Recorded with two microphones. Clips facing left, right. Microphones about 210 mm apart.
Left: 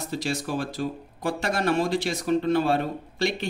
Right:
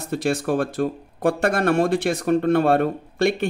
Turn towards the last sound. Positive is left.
turn(degrees=-55)  # may be behind; listen again after turning